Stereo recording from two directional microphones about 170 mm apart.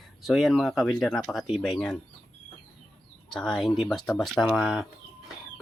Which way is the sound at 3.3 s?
5° left (ahead or behind).